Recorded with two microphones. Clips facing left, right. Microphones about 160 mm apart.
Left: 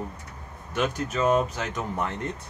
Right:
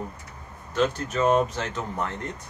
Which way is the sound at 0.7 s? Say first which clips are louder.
Right 2 dB; 15° left (ahead or behind).